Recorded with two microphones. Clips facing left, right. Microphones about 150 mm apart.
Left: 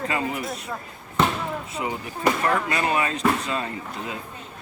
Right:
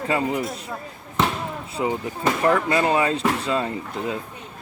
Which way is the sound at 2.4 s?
25° right (ahead or behind).